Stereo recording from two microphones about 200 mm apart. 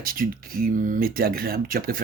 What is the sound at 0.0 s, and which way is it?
Speech, 45° right (ahead or behind).